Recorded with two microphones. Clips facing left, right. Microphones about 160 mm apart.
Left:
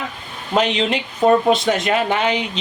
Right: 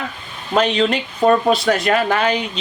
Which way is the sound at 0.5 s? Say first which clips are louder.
Right 2 dB; 20° left (ahead or behind).